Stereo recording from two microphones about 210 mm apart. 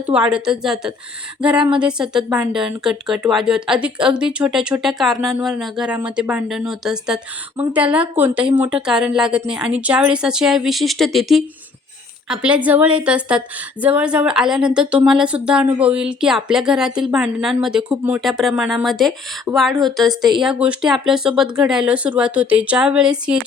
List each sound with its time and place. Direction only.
0.0 s a woman's voice: 5° right (ahead or behind)
19.5 s a woman's voice: 15° right (ahead or behind)
20.4 s a woman's voice: 5° right (ahead or behind)